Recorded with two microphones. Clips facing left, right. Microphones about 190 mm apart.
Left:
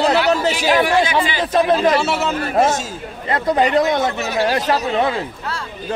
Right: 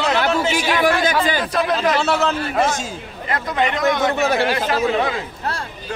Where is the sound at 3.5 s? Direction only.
35° left (ahead or behind).